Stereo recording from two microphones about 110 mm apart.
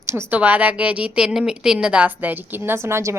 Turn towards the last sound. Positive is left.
turn(degrees=-25)  # may be behind; listen again after turning